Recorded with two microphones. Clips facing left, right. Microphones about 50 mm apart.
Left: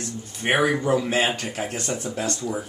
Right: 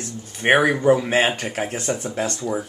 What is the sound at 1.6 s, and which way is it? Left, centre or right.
Speech, centre.